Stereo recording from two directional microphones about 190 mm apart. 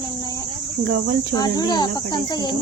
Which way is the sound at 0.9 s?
50° right (ahead or behind).